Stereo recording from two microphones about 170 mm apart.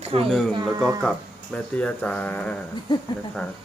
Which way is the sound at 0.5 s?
25° right (ahead or behind).